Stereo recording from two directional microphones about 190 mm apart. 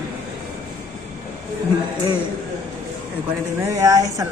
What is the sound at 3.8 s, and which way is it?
Speech, 15° right (ahead or behind).